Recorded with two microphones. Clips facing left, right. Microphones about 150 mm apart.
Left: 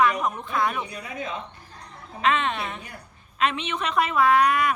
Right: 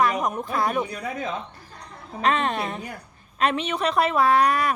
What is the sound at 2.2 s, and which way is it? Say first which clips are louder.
A woman's voice: right 1 dB; 40° right (ahead or behind).